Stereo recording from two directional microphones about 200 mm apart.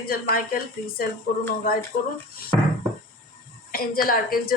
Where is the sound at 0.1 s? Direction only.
45° left (ahead or behind).